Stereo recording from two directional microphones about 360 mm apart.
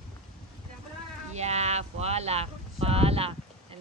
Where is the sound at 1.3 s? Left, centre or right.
Centre.